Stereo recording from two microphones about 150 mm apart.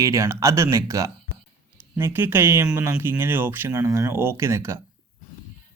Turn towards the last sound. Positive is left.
turn(degrees=-20)  # may be behind; listen again after turning